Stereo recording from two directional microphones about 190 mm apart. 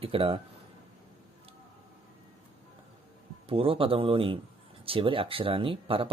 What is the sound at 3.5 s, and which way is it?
Speech, 30° right (ahead or behind).